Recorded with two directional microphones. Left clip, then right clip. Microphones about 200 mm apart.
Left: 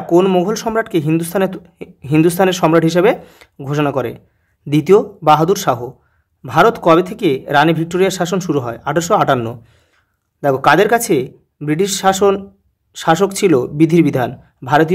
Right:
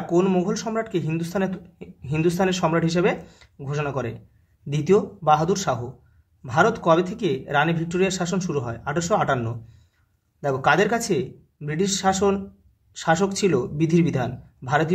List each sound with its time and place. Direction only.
0.0 s a man's voice: 45° left (ahead or behind)